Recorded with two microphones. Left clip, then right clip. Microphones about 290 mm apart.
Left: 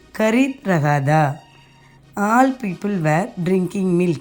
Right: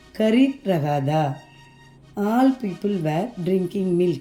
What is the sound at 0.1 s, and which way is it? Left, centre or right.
A woman's voice, centre.